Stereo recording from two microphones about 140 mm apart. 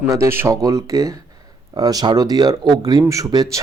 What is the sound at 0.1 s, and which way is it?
Speech, 20° right (ahead or behind).